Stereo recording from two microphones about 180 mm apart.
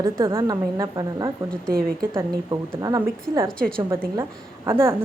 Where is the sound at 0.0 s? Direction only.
15° right (ahead or behind).